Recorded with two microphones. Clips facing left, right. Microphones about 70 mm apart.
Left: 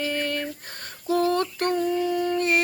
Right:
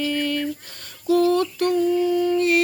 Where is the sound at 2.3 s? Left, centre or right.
Left.